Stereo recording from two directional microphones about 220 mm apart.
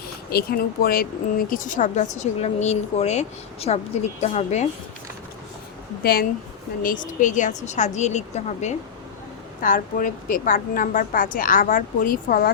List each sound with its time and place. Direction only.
0.3 s a woman's voice: 45° left (ahead or behind)
6.0 s speech: 45° left (ahead or behind)